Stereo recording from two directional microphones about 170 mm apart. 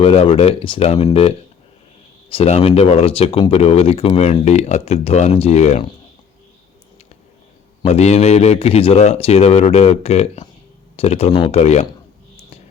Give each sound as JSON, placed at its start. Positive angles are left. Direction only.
{"t": 0.0, "sound": "speech", "side_deg": 35}
{"t": 2.3, "sound": "speech", "side_deg": 40}
{"t": 7.9, "sound": "speech", "side_deg": 40}
{"t": 11.3, "sound": "speech", "side_deg": 25}
{"t": 11.5, "sound": "speech", "side_deg": 40}